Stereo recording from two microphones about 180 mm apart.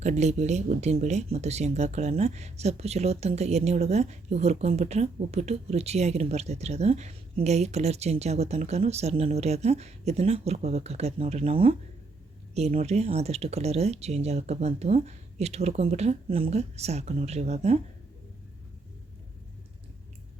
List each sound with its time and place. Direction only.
0.0 s speech: 40° right (ahead or behind)